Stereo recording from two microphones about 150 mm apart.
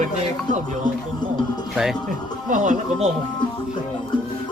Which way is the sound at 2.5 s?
60° right (ahead or behind).